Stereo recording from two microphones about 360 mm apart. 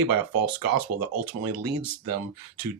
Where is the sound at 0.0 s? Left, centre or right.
Right.